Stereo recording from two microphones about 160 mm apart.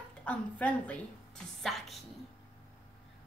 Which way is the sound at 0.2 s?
10° left (ahead or behind).